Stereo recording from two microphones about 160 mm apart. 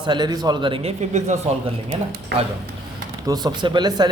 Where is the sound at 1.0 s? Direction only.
45° right (ahead or behind).